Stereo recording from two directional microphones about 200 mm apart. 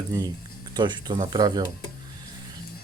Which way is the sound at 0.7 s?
20° right (ahead or behind).